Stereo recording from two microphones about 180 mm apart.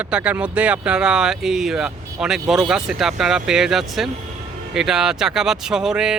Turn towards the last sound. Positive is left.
turn(degrees=-5)  # may be behind; listen again after turning